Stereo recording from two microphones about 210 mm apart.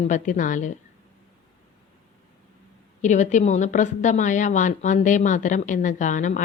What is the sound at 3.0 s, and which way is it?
A woman's voice, 35° left (ahead or behind).